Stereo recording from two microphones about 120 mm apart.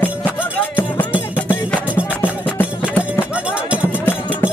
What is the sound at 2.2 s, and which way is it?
Music, 15° left (ahead or behind).